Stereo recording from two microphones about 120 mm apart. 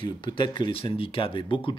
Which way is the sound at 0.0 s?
45° left (ahead or behind).